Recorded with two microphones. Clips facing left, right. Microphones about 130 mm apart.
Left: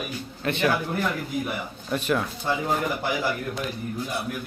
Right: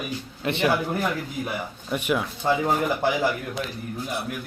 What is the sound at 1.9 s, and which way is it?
Speech, 10° right (ahead or behind).